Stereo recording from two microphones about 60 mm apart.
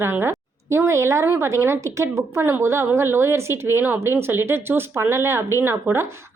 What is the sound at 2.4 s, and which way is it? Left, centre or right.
Speech, right.